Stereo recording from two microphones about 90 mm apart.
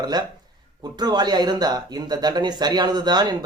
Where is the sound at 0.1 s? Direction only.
50° right (ahead or behind).